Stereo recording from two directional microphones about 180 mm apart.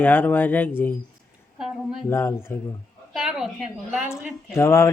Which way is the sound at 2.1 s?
15° left (ahead or behind).